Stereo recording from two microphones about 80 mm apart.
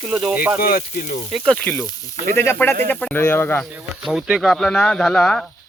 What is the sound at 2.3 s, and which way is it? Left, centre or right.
Speech, left.